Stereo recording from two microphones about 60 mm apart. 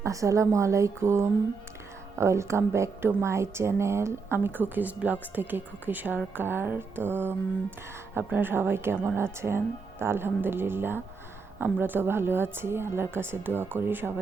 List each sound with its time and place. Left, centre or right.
0.0 s a woman's voice: right